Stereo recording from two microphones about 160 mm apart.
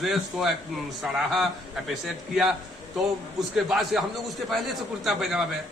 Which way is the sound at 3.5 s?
Centre (ahead or behind).